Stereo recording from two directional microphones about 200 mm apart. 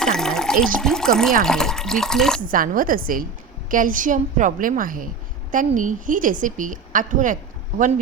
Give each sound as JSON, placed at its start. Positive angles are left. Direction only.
{"t": 0.0, "sound": "water", "side_deg": 5}
{"t": 1.5, "sound": "speech", "side_deg": 5}
{"t": 2.5, "sound": "a woman's voice", "side_deg": -45}